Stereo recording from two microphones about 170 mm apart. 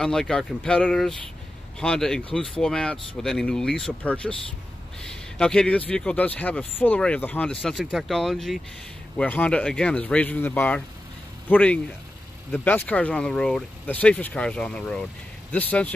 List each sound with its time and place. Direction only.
0.0 s speech: 5° left (ahead or behind)